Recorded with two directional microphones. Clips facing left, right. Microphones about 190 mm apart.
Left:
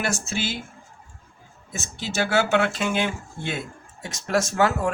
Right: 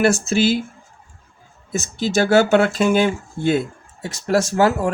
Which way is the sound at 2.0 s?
40° right (ahead or behind).